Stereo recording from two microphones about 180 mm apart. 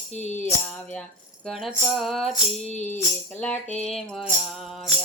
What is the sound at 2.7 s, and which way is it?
Music, 40° left (ahead or behind).